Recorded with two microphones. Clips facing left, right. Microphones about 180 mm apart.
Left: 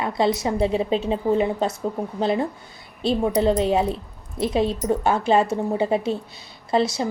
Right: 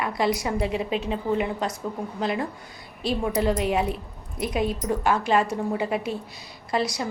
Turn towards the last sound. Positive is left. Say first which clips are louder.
# left 5 dB
turn(degrees=25)  # may be behind; listen again after turning